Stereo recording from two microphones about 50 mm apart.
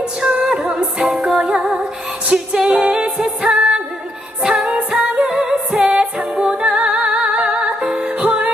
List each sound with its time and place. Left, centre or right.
0.0 s music: right
8.2 s music: right